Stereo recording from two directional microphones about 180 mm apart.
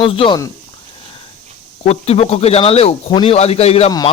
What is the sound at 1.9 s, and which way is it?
Speech, 35° left (ahead or behind).